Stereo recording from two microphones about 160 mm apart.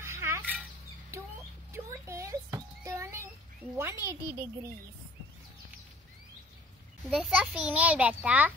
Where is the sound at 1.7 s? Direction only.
15° right (ahead or behind).